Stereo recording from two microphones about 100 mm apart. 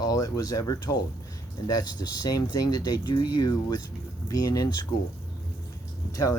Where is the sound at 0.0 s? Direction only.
35° left (ahead or behind).